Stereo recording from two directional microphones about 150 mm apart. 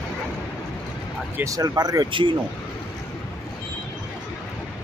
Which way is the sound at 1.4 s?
25° right (ahead or behind).